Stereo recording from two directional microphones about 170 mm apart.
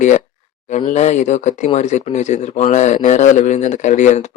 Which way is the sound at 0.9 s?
45° left (ahead or behind).